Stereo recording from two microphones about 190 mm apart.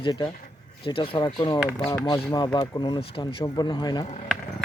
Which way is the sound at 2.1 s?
20° left (ahead or behind).